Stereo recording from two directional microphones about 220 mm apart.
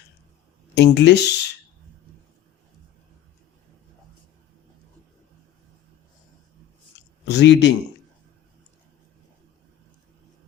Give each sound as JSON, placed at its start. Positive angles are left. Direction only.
{"t": 0.8, "sound": "speech", "side_deg": 50}
{"t": 7.3, "sound": "speech", "side_deg": 55}